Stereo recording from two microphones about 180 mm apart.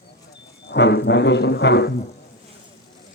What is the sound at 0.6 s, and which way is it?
Speech, 70° left (ahead or behind).